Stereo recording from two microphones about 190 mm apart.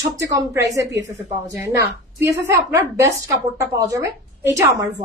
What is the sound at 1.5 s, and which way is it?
A woman's voice, 15° right (ahead or behind).